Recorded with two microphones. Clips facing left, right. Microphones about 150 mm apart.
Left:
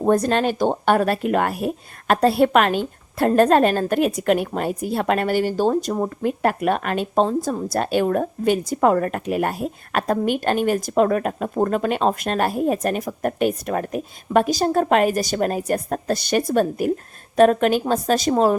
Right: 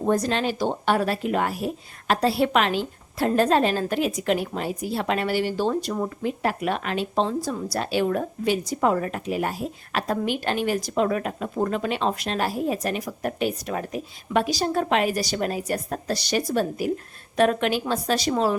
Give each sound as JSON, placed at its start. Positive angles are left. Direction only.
{"t": 0.0, "sound": "speech", "side_deg": 50}